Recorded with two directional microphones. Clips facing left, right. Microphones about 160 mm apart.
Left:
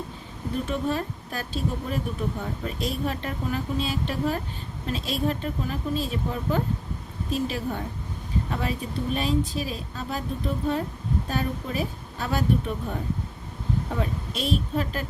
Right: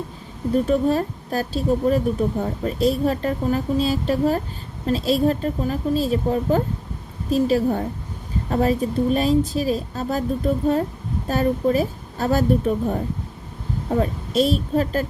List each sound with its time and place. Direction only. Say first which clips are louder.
0.6 s speech: right 7 dB; 40° right (ahead or behind)